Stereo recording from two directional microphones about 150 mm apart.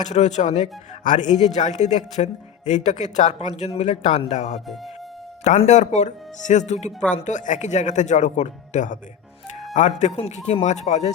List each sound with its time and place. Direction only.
0.0 s speech: 50° left (ahead or behind)
10.2 s speech: 45° left (ahead or behind)